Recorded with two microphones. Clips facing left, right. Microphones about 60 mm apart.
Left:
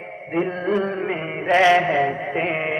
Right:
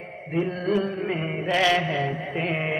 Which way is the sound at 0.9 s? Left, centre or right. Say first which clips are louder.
Left 2 dB; left.